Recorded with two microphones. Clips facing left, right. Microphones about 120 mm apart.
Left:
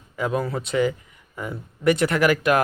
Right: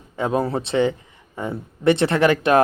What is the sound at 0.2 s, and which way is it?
Speech, 30° right (ahead or behind).